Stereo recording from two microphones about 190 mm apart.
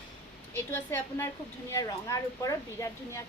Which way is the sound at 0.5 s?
10° left (ahead or behind).